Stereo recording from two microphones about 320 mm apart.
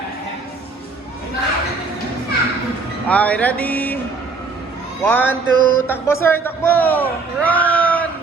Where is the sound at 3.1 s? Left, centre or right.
Centre.